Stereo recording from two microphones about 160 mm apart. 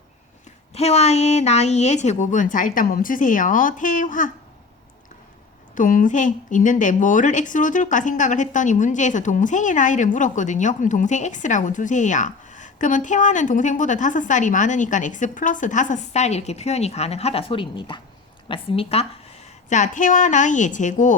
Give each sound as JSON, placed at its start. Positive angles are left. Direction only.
{"t": 0.7, "sound": "speech", "side_deg": 40}
{"t": 5.7, "sound": "a woman's voice", "side_deg": 55}
{"t": 19.7, "sound": "speech", "side_deg": 50}